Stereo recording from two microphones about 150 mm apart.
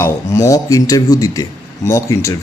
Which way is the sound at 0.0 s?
25° left (ahead or behind).